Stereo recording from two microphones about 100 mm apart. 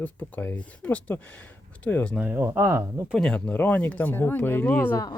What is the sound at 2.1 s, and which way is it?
Speech, 20° right (ahead or behind).